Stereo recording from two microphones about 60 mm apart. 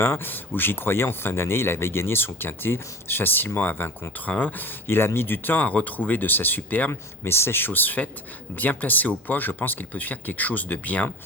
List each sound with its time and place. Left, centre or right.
0.0 s speech: left
7.3 s speech: left